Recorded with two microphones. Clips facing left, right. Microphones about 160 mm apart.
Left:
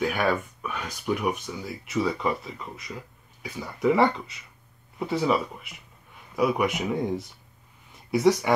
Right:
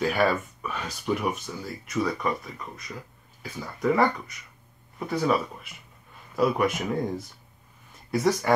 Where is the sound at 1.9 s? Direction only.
20° left (ahead or behind).